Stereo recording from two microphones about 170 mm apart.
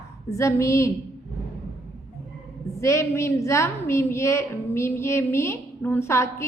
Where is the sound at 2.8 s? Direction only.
15° left (ahead or behind).